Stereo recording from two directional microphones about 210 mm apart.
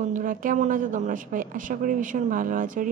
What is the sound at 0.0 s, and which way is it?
Speech, 40° right (ahead or behind).